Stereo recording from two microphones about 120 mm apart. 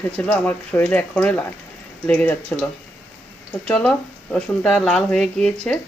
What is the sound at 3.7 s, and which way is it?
Speech, 10° left (ahead or behind).